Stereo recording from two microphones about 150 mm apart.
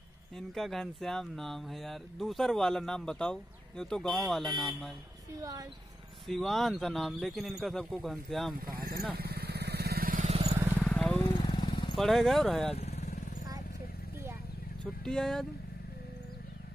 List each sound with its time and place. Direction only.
0.6 s speech: centre (ahead or behind)
5.4 s speech: 25° right (ahead or behind)
6.2 s speech: centre (ahead or behind)
8.5 s speech: 85° right
9.1 s vehicle: 90° right; by 10.3 s 65° right (ahead or behind)
10.8 s vehicle: 5° left (ahead or behind)
11.2 s vehicle: 30° left (ahead or behind)
11.9 s speech: centre (ahead or behind)
12.7 s vehicle: 45° left (ahead or behind)
15.0 s speech: 5° left (ahead or behind)